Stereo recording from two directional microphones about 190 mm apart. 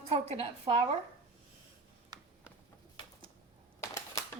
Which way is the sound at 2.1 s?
20° right (ahead or behind).